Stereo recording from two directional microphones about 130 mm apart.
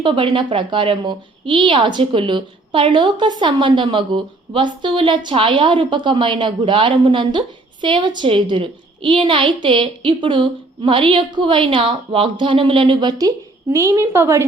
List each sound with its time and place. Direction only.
0.0 s speech: 40° right (ahead or behind); by 14.4 s 20° right (ahead or behind)